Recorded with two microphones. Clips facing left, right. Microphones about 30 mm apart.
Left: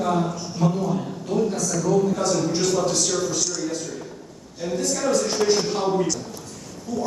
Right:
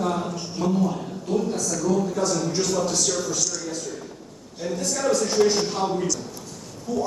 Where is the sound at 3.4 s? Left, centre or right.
Left.